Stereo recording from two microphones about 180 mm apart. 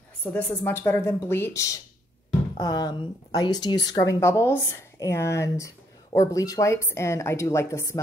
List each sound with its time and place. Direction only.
0.2 s a woman's voice: 10° left (ahead or behind)